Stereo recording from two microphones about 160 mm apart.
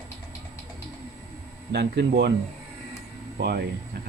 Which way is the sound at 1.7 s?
90° right.